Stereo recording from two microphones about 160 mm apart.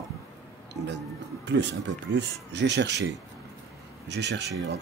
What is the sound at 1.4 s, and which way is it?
Speech, 90° right.